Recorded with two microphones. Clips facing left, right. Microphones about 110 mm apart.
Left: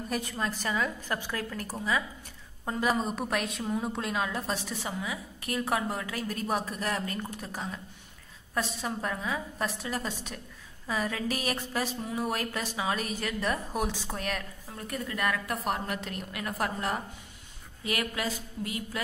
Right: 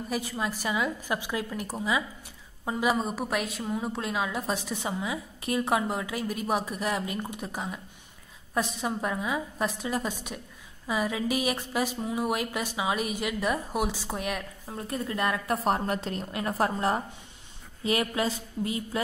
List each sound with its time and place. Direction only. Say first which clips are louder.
0.1 s a woman's voice: right 1 dB; 5° right (ahead or behind)
14.7 s a woman's voice: right 4 dB; 25° right (ahead or behind)